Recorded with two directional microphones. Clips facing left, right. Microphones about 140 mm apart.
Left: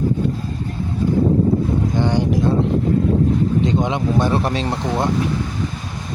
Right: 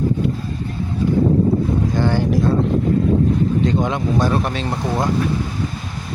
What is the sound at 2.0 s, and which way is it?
Vehicle, 20° left (ahead or behind).